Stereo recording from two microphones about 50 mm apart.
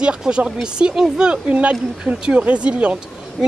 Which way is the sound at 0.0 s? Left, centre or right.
Centre.